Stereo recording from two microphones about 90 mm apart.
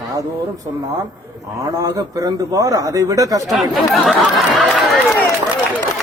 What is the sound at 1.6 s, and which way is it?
Speech, 40° right (ahead or behind).